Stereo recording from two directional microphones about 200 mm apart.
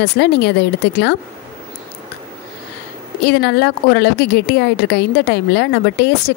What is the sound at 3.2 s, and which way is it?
Speech, 55° left (ahead or behind).